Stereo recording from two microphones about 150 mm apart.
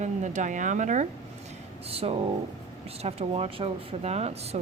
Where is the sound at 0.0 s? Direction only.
55° right (ahead or behind).